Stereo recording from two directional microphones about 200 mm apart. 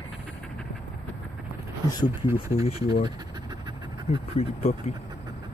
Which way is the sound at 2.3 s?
15° right (ahead or behind).